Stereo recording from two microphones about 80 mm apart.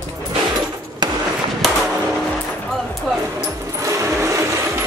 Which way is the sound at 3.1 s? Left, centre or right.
Centre.